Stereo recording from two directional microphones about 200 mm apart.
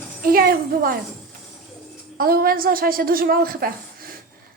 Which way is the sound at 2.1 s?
45° right (ahead or behind).